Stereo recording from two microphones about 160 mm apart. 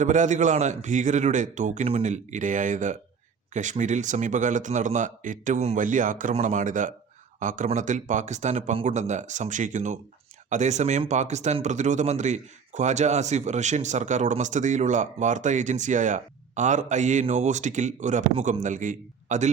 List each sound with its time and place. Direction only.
0.0 s speech: 50° right (ahead or behind)